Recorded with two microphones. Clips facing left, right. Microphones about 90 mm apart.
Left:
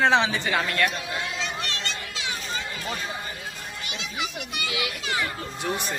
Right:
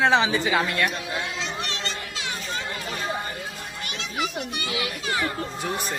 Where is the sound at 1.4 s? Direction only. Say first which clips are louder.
Right 1 dB; 20° right (ahead or behind).